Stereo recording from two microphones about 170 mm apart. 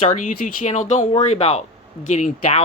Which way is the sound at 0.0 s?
45° left (ahead or behind).